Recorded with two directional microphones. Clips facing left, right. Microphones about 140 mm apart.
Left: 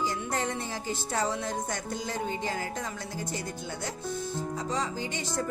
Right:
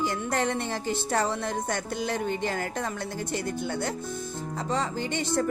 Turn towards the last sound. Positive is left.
turn(degrees=-65)  # may be behind; listen again after turning